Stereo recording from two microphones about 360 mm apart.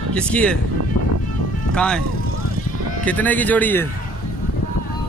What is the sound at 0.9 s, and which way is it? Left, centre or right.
Music, left.